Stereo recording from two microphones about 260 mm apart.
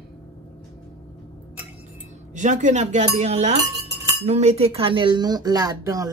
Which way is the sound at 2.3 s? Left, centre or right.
Right.